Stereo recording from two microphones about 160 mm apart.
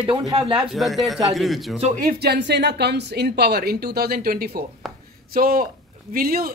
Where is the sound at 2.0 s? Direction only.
90° right.